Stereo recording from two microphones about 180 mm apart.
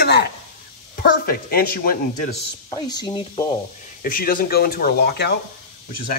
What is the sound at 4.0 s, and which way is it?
Speech, 50° left (ahead or behind).